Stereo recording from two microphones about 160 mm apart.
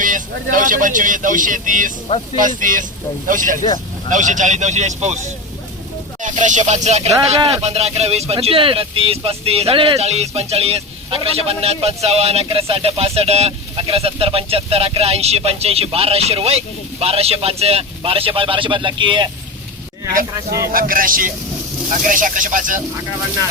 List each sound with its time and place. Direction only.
0.0 s a man's voice: 55° right (ahead or behind)
6.2 s a man's voice: 50° right (ahead or behind); by 19.3 s 30° right (ahead or behind)
20.3 s speech: 20° right (ahead or behind)
20.7 s speech: 60° right (ahead or behind)